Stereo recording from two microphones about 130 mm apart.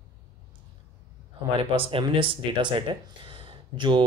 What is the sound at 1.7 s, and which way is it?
Speech, 45° right (ahead or behind).